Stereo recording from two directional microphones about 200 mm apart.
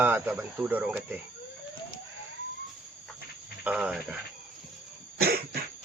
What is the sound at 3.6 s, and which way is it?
Cricket, 5° right (ahead or behind).